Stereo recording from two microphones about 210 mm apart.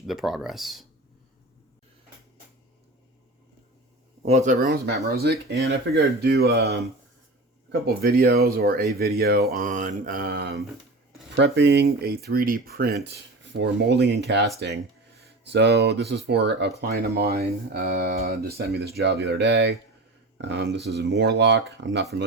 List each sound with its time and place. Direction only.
0.1 s speech: centre (ahead or behind)
4.3 s speech: 35° right (ahead or behind); by 14.4 s 55° right (ahead or behind)
15.4 s speech: 55° right (ahead or behind)